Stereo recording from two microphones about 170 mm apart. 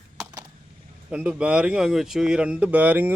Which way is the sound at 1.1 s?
5° right (ahead or behind).